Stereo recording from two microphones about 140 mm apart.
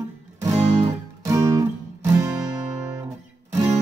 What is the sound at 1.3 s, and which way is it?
Music, 25° right (ahead or behind).